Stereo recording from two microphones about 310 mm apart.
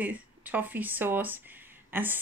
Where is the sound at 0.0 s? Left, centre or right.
Centre.